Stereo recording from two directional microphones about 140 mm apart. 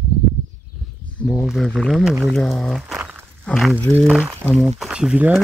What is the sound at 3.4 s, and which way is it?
Walk, centre (ahead or behind).